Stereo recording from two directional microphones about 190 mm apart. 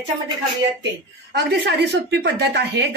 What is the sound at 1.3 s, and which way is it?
Speech, 60° right (ahead or behind).